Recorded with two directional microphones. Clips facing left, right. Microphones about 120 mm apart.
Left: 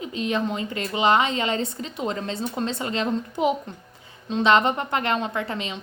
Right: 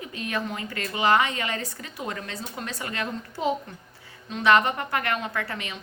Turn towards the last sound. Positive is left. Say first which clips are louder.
# left 4 dB
turn(degrees=20)  # may be behind; listen again after turning